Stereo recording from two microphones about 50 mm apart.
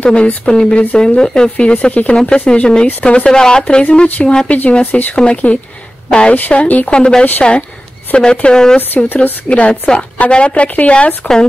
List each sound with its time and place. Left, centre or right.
0.0 s speech: left
4.5 s speech: left
8.7 s speech: left
9.5 s speech: left